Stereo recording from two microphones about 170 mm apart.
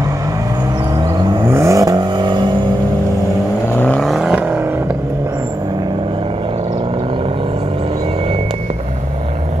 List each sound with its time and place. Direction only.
0.9 s vehicle: 25° right (ahead or behind)
3.7 s vehicle: 10° left (ahead or behind)